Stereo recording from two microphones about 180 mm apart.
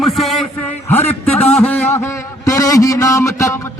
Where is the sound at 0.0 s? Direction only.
Centre (ahead or behind).